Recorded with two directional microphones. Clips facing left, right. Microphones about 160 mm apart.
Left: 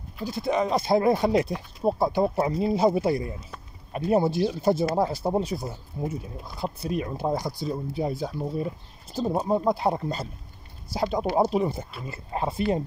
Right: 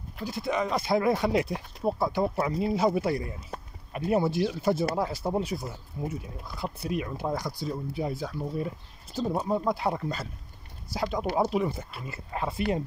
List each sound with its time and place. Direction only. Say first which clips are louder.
0.2 s speech: left 4 dB; 30° left (ahead or behind)